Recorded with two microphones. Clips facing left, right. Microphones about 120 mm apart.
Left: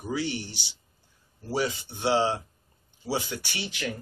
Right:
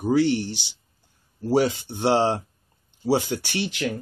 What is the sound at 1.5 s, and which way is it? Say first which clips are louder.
Speech: right 7 dB; 60° right (ahead or behind).